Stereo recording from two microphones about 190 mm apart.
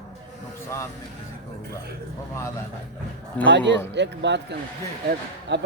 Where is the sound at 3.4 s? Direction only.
70° right (ahead or behind).